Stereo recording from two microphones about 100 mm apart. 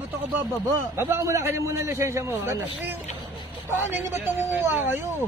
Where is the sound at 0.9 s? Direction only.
25° right (ahead or behind).